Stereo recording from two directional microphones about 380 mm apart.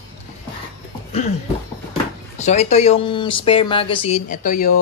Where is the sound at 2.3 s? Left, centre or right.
Centre.